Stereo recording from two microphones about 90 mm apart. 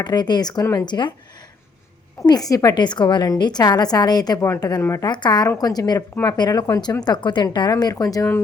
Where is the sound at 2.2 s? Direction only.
45° left (ahead or behind).